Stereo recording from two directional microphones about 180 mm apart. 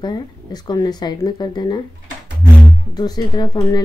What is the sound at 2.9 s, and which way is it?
Speech, 20° left (ahead or behind).